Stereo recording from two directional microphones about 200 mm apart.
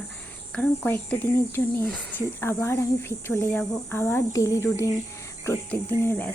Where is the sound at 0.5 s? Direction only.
5° left (ahead or behind).